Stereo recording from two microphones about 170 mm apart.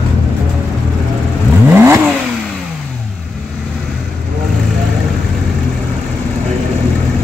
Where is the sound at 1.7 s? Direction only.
15° right (ahead or behind).